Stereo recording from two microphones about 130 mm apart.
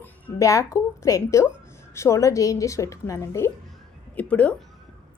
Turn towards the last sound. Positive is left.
turn(degrees=10)  # may be behind; listen again after turning